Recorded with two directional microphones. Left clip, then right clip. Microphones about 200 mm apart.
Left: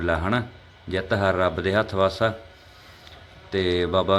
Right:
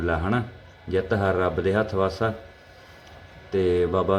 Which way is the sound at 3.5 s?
10° left (ahead or behind).